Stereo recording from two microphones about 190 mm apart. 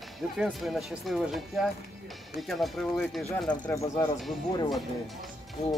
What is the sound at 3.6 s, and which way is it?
Speech, 15° left (ahead or behind).